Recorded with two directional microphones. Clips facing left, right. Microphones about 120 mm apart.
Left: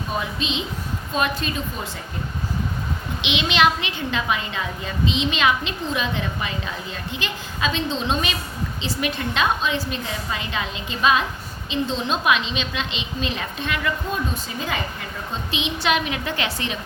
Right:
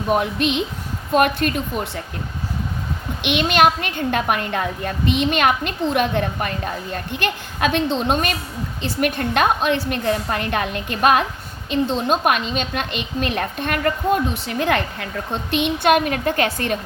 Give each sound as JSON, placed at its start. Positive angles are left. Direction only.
{"t": 0.1, "sound": "a woman's voice", "side_deg": -65}
{"t": 3.2, "sound": "a woman's voice", "side_deg": -55}